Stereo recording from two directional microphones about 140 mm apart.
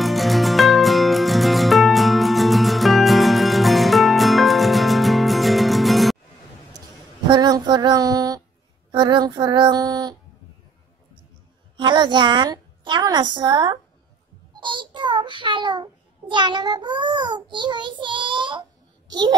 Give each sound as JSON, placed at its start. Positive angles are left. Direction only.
{"t": 0.0, "sound": "music", "side_deg": 0}
{"t": 7.2, "sound": "child singing", "side_deg": -30}
{"t": 8.9, "sound": "female singing", "side_deg": -30}
{"t": 11.7, "sound": "a woman's voice", "side_deg": -35}
{"t": 14.5, "sound": "child singing", "side_deg": -35}